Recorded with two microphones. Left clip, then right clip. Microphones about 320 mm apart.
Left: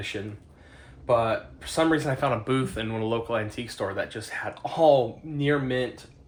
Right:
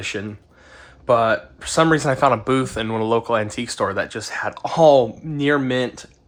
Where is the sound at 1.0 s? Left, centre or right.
Right.